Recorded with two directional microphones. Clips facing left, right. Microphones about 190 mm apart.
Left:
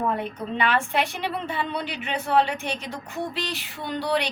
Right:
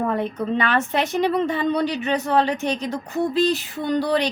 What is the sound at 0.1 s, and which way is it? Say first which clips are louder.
Speech: right 5 dB; 40° right (ahead or behind).